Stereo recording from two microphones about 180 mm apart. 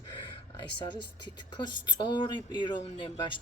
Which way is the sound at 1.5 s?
25° left (ahead or behind).